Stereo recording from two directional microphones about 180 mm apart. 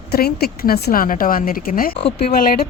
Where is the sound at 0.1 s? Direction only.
60° left (ahead or behind).